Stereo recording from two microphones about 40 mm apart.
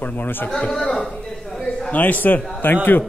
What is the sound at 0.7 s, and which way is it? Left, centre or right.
Speech, centre.